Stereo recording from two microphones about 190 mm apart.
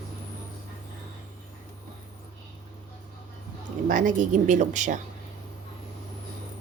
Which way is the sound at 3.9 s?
40° right (ahead or behind).